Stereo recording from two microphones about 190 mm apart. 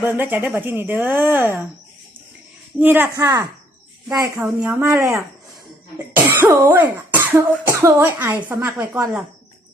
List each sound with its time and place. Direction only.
0.0 s speech: 10° right (ahead or behind)
2.7 s speech: 10° right (ahead or behind)
6.1 s throat clearing: 10° right (ahead or behind)
8.4 s speech: 15° right (ahead or behind)